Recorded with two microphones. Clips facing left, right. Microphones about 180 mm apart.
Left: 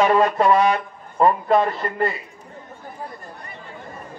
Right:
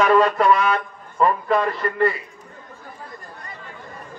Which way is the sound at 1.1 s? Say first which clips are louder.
Left 2 dB; 25° left (ahead or behind).